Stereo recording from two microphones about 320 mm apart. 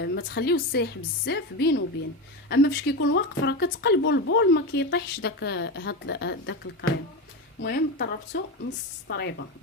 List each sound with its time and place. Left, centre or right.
0.0 s speech: left